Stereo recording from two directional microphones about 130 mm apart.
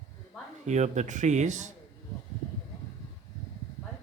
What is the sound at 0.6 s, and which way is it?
Speech, 65° right (ahead or behind).